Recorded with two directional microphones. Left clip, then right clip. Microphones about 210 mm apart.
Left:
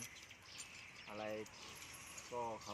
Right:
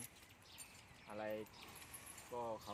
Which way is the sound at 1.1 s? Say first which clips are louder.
Even; 5° left (ahead or behind).